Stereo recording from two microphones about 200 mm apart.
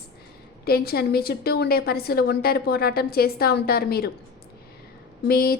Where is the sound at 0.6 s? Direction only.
50° left (ahead or behind).